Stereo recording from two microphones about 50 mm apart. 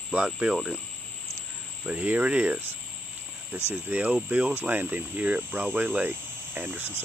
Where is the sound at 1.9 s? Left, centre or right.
Right.